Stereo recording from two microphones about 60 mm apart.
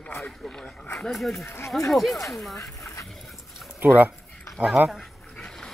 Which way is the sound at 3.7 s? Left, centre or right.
Right.